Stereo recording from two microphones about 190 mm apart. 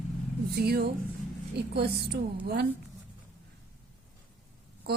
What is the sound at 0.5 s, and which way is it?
A woman's voice, 55° right (ahead or behind).